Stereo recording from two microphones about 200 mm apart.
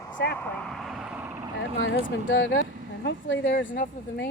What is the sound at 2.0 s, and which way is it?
A woman's voice, 65° left (ahead or behind).